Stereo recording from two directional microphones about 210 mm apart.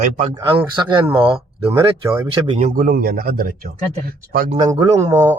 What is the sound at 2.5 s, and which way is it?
A man's voice, 30° right (ahead or behind).